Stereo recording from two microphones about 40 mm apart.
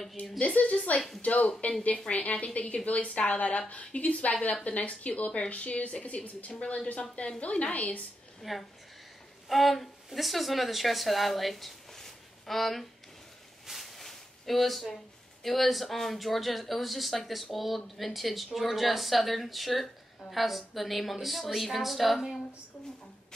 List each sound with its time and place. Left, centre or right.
0.4 s a woman's voice: left
8.4 s a woman's voice: centre
13.7 s a sound: centre
15.4 s speech: centre